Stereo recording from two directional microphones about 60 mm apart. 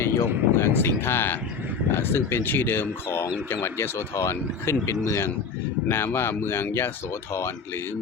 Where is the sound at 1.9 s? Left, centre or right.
Left.